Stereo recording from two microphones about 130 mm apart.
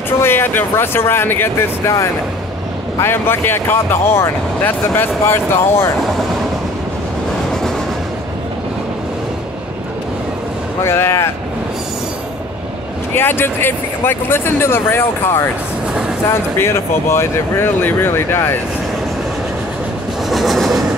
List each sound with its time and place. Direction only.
0.2 s speech: 15° left (ahead or behind)
10.8 s speech: 20° left (ahead or behind)
13.1 s speech: 15° left (ahead or behind)
20.2 s train: centre (ahead or behind)